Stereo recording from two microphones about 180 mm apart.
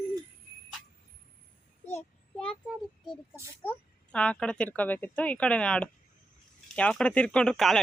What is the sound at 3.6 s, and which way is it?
Speech, 10° left (ahead or behind).